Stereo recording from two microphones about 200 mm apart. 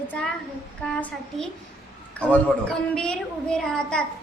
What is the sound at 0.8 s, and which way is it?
A woman's voice, 5° left (ahead or behind).